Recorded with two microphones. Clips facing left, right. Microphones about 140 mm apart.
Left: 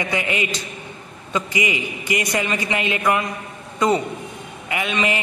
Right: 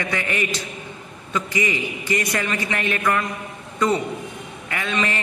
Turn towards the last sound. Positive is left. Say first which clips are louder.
# left 2 dB
turn(degrees=15)  # may be behind; listen again after turning